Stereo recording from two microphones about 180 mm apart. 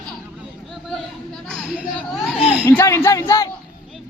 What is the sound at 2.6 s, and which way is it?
Speech, 15° left (ahead or behind).